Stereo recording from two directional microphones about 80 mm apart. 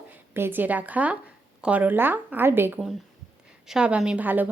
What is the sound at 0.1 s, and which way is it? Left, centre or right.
A woman's voice, right.